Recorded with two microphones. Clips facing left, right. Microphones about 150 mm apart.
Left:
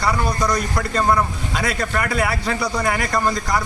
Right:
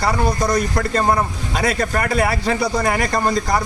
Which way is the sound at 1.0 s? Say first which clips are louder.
Even; 30° right (ahead or behind).